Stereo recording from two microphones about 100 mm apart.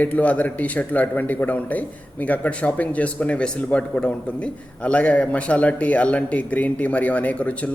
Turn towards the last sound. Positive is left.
turn(degrees=15)  # may be behind; listen again after turning